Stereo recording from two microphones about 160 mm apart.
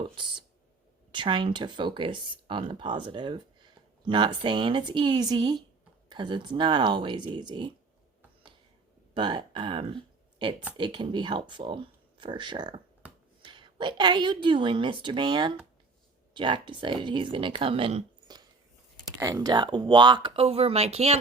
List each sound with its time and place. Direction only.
0.2 s a sound: 30° right (ahead or behind)
1.1 s speech: 30° right (ahead or behind)
9.1 s speech: 30° right (ahead or behind)